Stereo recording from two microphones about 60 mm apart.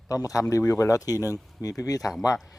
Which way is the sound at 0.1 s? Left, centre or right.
Left.